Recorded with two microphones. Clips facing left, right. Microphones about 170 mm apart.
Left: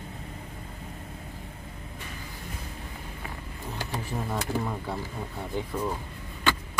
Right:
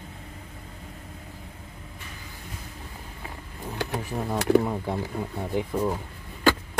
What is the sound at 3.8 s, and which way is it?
Speech, 65° right (ahead or behind).